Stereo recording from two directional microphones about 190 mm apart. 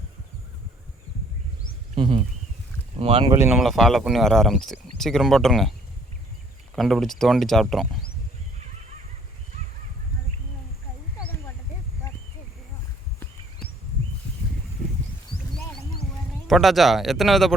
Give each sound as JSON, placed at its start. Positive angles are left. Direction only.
{"t": 2.0, "sound": "speech", "side_deg": -30}
{"t": 3.2, "sound": "speech", "side_deg": -15}
{"t": 3.5, "sound": "speech", "side_deg": 0}
{"t": 6.7, "sound": "speech", "side_deg": 0}
{"t": 16.5, "sound": "speech", "side_deg": 0}